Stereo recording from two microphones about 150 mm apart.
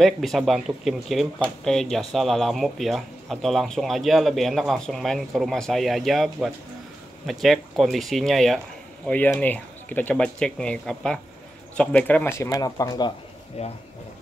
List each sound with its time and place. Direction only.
0.0 s speech: centre (ahead or behind); by 13.1 s 25° left (ahead or behind)
13.6 s speech: 45° left (ahead or behind)